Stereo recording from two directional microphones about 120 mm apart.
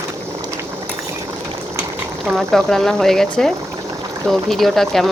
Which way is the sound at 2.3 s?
5° left (ahead or behind).